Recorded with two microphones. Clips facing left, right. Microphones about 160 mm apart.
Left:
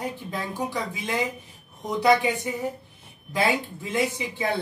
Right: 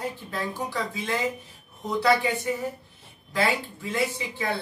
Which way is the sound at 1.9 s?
15° left (ahead or behind).